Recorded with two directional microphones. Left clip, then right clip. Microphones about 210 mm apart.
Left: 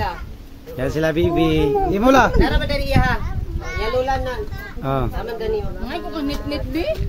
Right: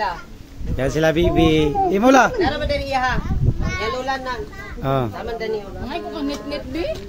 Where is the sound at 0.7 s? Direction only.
15° right (ahead or behind).